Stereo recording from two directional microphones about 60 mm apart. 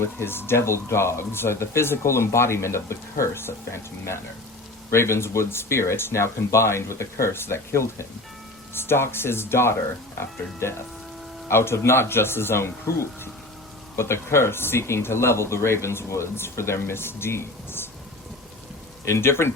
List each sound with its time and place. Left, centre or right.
0.0 s speech: left
11.4 s speech: left
19.0 s speech: left